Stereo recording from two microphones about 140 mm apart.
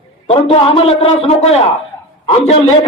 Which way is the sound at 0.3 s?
40° left (ahead or behind).